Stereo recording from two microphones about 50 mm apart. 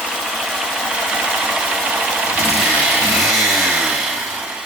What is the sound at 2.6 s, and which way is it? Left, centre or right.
Vehicle, centre.